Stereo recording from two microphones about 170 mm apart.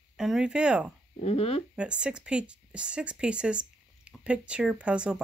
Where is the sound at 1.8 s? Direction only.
5° right (ahead or behind).